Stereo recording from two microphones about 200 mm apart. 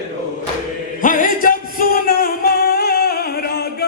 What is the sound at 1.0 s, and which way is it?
Music, 45° left (ahead or behind).